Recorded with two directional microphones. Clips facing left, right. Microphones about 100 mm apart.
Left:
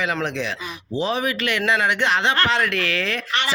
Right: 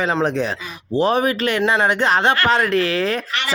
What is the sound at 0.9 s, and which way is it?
Speech, 45° right (ahead or behind).